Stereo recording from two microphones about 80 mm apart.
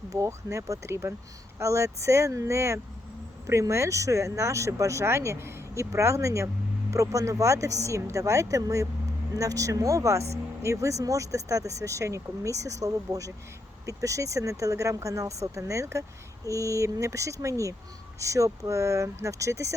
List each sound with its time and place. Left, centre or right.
0.1 s speech: right